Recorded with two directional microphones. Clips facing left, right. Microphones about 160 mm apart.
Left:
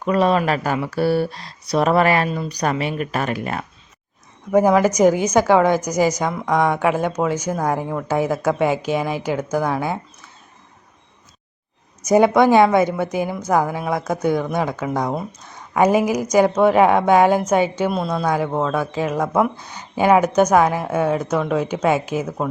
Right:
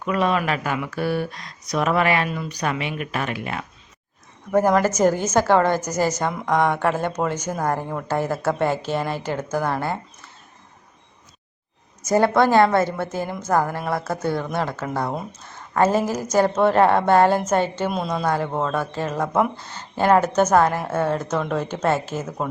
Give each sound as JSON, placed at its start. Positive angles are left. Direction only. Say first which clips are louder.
{"t": 0.0, "sound": "speech", "louder": "left 4 dB", "side_deg": 35}
{"t": 4.5, "sound": "a woman's voice", "louder": "left 3 dB", "side_deg": 10}
{"t": 12.0, "sound": "a woman's voice", "louder": "left 4 dB", "side_deg": 15}